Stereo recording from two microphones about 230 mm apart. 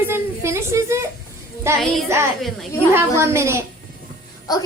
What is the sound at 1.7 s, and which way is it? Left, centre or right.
A woman's voice, centre.